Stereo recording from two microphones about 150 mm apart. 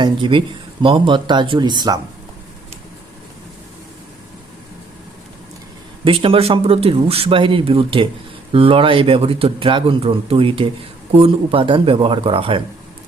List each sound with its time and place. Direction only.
0.0 s a man's voice: 35° right (ahead or behind)
6.1 s a man's voice: 35° right (ahead or behind)